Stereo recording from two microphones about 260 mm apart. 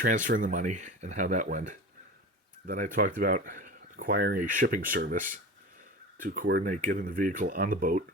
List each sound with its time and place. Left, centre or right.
0.0 s speech: right